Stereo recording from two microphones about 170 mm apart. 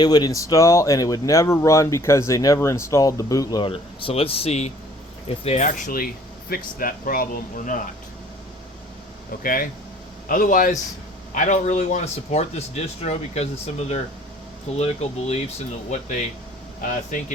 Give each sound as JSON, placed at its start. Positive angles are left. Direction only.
{"t": 0.0, "sound": "speech", "side_deg": 25}
{"t": 9.4, "sound": "speech", "side_deg": 55}
{"t": 15.3, "sound": "speech", "side_deg": 40}